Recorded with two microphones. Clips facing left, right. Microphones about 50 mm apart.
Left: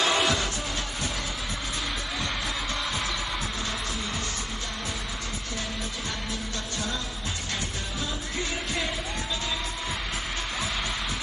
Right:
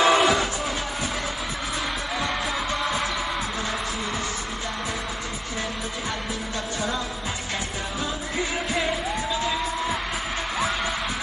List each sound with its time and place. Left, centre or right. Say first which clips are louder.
0.0 s music: right 6 dB; centre
2.1 s music: right 6 dB; centre